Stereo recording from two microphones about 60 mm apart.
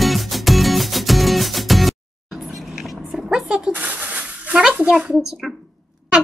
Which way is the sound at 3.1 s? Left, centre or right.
Centre.